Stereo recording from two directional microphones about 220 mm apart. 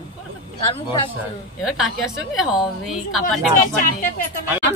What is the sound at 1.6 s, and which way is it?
A woman's voice, centre (ahead or behind).